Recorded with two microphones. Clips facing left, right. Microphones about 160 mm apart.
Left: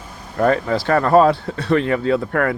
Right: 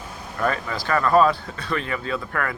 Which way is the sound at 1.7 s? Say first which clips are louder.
Left 10 dB; 60° left (ahead or behind).